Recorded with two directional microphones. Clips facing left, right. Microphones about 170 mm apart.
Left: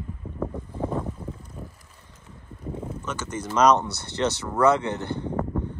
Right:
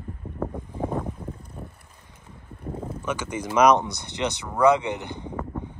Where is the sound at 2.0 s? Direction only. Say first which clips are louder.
Even; 10° right (ahead or behind).